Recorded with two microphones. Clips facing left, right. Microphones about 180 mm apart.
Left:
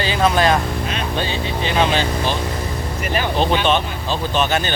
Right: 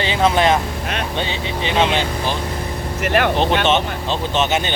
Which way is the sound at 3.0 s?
70° right (ahead or behind).